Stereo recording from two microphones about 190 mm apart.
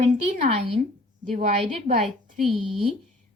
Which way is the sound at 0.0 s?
35° right (ahead or behind).